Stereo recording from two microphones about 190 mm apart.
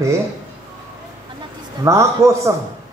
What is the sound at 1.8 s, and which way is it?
Speech, 15° right (ahead or behind).